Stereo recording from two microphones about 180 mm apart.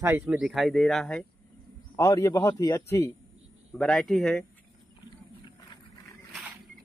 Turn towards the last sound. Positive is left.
turn(degrees=25)  # may be behind; listen again after turning